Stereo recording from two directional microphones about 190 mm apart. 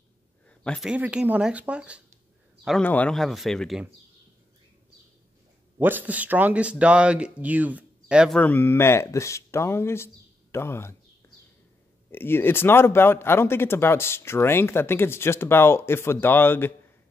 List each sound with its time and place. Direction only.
0.5 s speech: 5° left (ahead or behind)
2.6 s speech: 5° left (ahead or behind)
5.8 s speech: 10° right (ahead or behind)
8.4 s speech: 10° left (ahead or behind)